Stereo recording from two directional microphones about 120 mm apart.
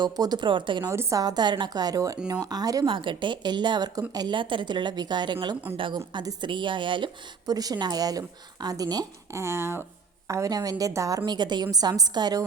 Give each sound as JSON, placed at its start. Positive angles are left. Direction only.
{"t": 0.0, "sound": "a woman's voice", "side_deg": -35}
{"t": 0.9, "sound": "a woman's voice", "side_deg": -25}
{"t": 2.8, "sound": "a woman's voice", "side_deg": -45}